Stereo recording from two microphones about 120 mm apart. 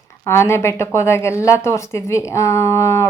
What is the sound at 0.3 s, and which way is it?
Speech, 20° left (ahead or behind).